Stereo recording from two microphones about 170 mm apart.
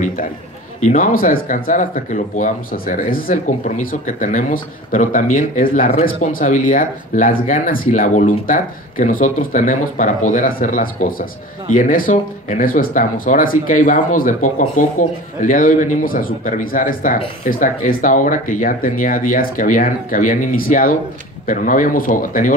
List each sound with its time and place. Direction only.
0.7 s speech: 45° left (ahead or behind)